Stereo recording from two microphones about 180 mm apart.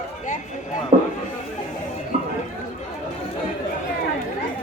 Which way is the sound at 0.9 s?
35° right (ahead or behind).